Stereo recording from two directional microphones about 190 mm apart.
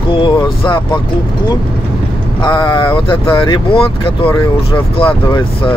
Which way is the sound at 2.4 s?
25° left (ahead or behind).